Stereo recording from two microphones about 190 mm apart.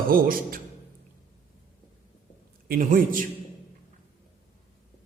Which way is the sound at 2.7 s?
45° right (ahead or behind).